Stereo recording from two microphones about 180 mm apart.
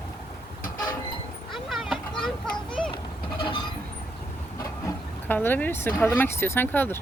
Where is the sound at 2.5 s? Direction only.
30° left (ahead or behind).